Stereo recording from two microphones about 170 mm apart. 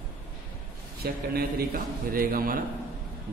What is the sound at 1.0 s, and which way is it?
A man's voice, 65° right (ahead or behind).